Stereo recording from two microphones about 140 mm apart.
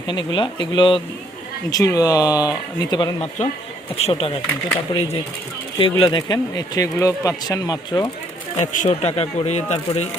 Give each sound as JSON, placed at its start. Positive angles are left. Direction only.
{"t": 0.1, "sound": "speech", "side_deg": 35}
{"t": 1.7, "sound": "speech", "side_deg": 25}
{"t": 3.2, "sound": "speech", "side_deg": 55}
{"t": 8.5, "sound": "speech", "side_deg": 60}